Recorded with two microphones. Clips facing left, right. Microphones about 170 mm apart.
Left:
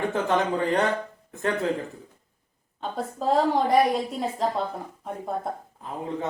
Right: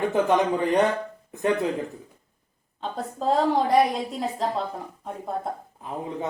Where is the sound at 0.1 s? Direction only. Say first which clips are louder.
Right 3 dB; 15° right (ahead or behind).